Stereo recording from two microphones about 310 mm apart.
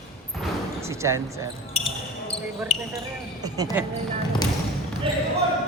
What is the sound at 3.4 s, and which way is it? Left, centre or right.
Speech, centre.